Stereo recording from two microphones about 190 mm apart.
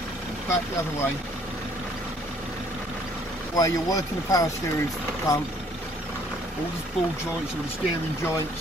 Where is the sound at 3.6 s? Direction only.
20° left (ahead or behind).